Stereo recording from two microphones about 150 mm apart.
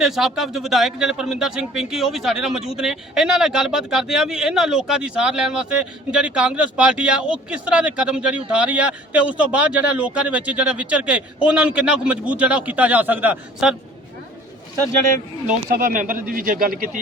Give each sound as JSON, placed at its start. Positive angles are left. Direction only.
{"t": 0.0, "sound": "a man's voice", "side_deg": 0}
{"t": 15.7, "sound": "speech", "side_deg": -65}